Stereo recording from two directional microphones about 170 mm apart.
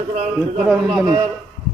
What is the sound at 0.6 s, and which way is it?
Speech, centre (ahead or behind).